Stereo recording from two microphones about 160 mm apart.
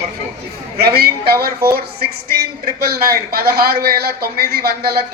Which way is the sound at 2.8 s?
70° right (ahead or behind).